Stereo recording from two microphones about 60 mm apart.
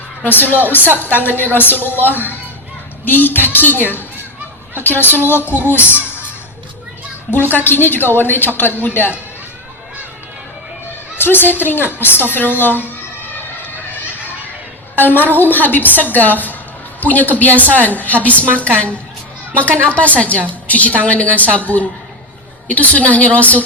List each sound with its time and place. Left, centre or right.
0.3 s a woman's voice: left
7.5 s a woman's voice: left
11.2 s a woman's voice: left
14.9 s a woman's voice: left
19.5 s a woman's voice: left